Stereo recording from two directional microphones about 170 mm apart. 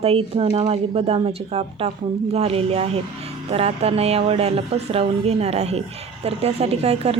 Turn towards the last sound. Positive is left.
turn(degrees=-35)  # may be behind; listen again after turning